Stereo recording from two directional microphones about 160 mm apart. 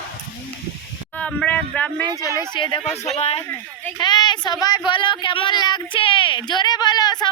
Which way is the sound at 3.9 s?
25° left (ahead or behind).